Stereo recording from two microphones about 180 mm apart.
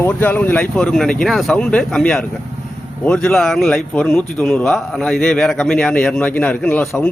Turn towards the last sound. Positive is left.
turn(degrees=5)  # may be behind; listen again after turning